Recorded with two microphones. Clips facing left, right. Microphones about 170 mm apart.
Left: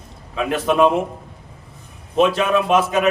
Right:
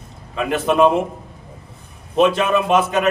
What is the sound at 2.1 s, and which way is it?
Speech, centre (ahead or behind).